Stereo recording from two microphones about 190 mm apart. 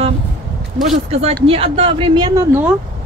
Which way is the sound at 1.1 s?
30° right (ahead or behind).